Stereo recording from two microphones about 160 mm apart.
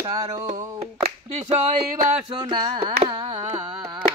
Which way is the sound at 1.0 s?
40° right (ahead or behind).